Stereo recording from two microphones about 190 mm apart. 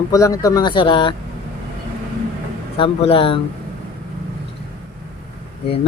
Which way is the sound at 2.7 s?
30° left (ahead or behind).